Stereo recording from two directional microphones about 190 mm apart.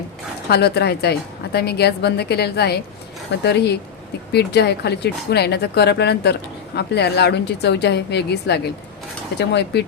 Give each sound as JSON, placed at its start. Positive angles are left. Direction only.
{"t": 0.5, "sound": "a woman's voice", "side_deg": 60}